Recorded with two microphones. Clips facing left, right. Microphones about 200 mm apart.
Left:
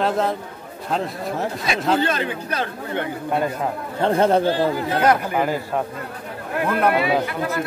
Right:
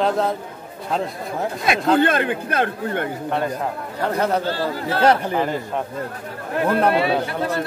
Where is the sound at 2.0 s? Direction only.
55° right (ahead or behind).